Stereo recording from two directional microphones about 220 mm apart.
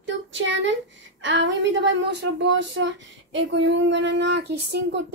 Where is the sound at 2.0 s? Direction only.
50° right (ahead or behind).